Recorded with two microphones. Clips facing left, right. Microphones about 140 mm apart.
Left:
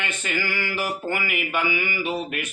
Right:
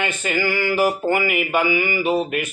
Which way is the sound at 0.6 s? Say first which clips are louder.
Right 9 dB; 40° right (ahead or behind).